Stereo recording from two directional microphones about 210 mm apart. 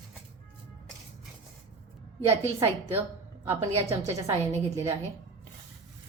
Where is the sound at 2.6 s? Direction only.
10° right (ahead or behind).